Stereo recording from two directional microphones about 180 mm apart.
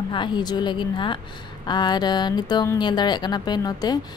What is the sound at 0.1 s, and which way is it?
Speech, 25° left (ahead or behind).